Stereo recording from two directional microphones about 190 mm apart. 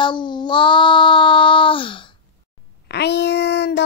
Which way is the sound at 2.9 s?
60° left (ahead or behind).